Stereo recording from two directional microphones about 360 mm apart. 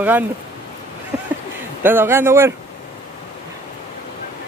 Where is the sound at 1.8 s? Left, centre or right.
Centre.